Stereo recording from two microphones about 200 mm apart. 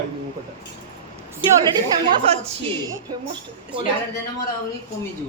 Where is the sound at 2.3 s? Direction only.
30° right (ahead or behind).